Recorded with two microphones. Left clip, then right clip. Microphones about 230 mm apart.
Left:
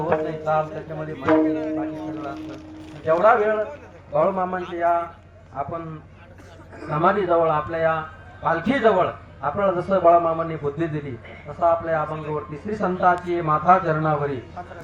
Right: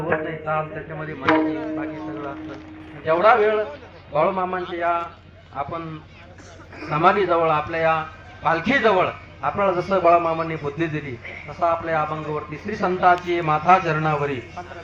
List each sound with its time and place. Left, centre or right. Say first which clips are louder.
0.0 s a man's voice: left 1 dB; left